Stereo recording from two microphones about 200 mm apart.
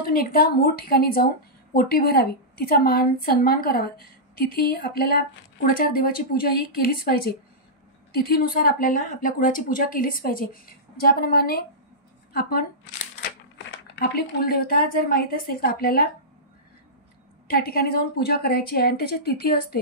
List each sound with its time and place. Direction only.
0.0 s speech: 50° left (ahead or behind)
13.9 s speech: 50° left (ahead or behind)
17.5 s speech: 50° left (ahead or behind)